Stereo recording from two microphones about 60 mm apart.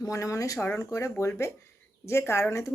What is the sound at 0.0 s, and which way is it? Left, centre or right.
Speech, left.